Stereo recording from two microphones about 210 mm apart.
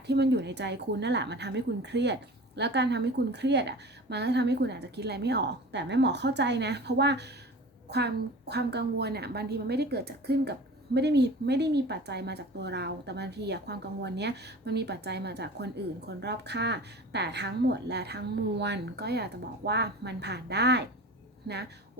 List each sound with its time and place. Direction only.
0.1 s a woman's voice: 55° right (ahead or behind)